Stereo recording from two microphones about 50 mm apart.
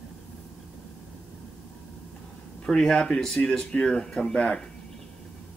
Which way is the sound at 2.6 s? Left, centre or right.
Centre.